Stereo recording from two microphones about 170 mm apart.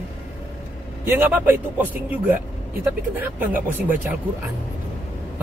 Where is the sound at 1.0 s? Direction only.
10° right (ahead or behind).